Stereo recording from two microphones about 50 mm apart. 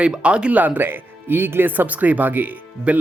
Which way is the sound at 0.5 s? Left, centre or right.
Right.